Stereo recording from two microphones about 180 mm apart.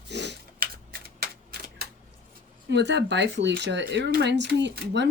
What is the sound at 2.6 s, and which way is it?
Speech, 75° right (ahead or behind).